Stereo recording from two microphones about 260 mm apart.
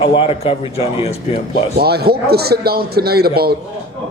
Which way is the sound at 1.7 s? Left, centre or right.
Right.